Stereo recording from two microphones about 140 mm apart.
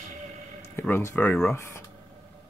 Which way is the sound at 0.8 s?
15° left (ahead or behind).